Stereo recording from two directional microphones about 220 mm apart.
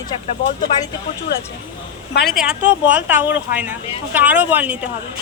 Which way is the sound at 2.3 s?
Centre (ahead or behind).